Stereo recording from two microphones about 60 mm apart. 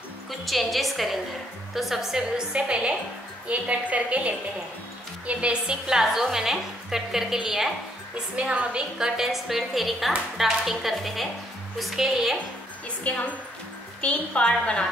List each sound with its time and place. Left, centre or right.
0.5 s a woman's voice: centre
8.4 s a woman's voice: centre
8.9 s a woman's voice: centre
13.0 s a woman's voice: left